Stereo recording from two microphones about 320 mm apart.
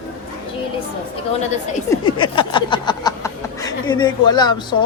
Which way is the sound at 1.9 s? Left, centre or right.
Centre.